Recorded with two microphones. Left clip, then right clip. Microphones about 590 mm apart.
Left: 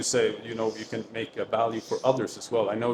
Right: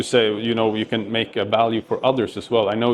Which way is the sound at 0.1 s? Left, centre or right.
Right.